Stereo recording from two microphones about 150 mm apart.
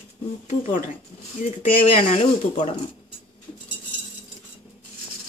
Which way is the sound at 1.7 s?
40° left (ahead or behind).